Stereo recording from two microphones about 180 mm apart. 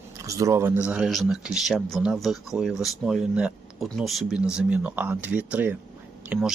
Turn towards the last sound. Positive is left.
turn(degrees=-5)  # may be behind; listen again after turning